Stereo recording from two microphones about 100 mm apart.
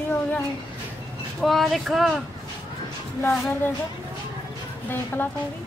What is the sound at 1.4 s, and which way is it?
Speech, centre (ahead or behind).